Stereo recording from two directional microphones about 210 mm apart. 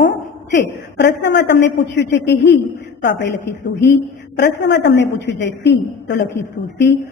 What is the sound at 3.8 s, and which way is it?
A woman's voice, 55° left (ahead or behind).